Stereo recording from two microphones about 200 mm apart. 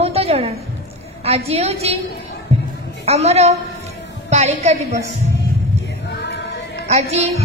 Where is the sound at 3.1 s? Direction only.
30° right (ahead or behind).